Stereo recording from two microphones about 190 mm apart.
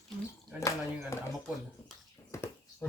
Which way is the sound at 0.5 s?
15° right (ahead or behind).